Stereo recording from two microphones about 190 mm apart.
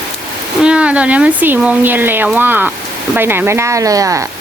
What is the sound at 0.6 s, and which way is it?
Speech, 5° right (ahead or behind).